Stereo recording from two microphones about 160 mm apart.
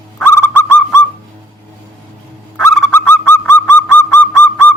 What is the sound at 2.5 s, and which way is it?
Goose, 15° left (ahead or behind).